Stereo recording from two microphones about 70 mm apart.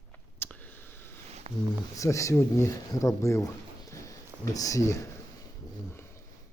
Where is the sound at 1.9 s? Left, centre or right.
Left.